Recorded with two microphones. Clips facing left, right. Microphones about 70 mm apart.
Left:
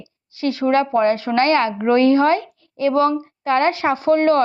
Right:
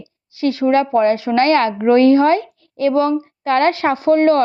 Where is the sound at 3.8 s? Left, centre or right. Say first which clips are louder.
Right 2 dB; centre.